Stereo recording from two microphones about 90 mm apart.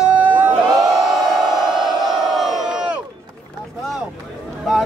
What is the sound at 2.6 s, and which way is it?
Run, 10° right (ahead or behind).